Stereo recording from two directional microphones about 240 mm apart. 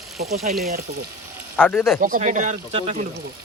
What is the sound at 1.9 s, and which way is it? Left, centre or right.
Speech, right.